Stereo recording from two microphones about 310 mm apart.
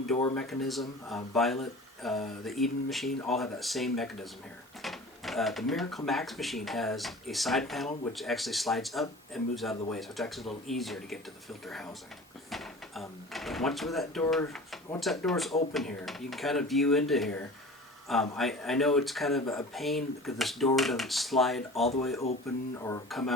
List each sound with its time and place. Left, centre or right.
0.3 s speech: centre
4.8 s a sound: centre
6.1 s speech: centre
22.3 s music: left
22.8 s speech: centre